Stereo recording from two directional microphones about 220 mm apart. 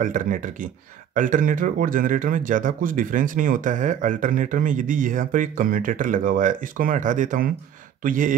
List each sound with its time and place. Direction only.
0.0 s speech: 35° right (ahead or behind)